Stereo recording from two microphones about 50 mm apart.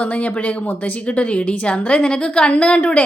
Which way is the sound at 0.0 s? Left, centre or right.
Left.